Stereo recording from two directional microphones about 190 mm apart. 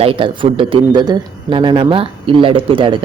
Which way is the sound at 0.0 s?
30° right (ahead or behind).